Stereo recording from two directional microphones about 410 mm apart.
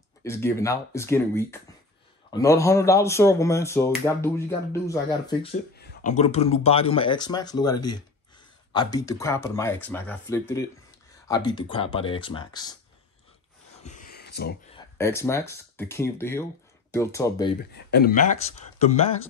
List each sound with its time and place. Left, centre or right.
0.2 s speech: centre
8.7 s speech: centre
13.8 s a sound: centre
15.0 s speech: centre
17.7 s speech: left